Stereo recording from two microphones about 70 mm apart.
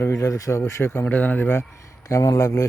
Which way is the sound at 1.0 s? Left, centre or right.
Left.